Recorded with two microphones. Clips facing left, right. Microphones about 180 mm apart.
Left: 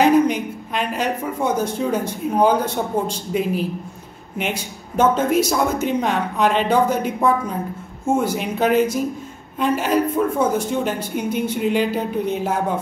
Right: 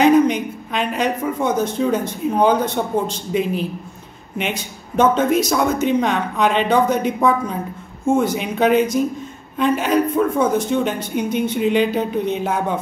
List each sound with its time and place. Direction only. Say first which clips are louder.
0.0 s a woman's voice: right 2 dB; 5° left (ahead or behind)